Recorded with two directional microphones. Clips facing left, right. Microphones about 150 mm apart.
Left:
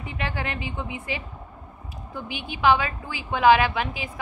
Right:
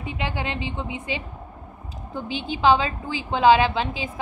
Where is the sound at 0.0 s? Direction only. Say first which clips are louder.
Right 2 dB; 20° right (ahead or behind).